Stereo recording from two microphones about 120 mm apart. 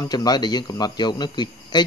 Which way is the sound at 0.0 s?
35° left (ahead or behind).